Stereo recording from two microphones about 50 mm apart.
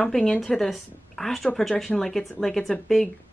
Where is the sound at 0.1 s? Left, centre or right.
Centre.